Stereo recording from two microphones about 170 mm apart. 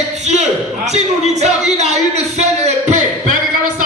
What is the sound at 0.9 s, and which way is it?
Speech, 40° right (ahead or behind).